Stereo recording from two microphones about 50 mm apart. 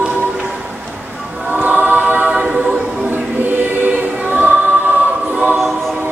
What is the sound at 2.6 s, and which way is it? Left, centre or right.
Choir, right.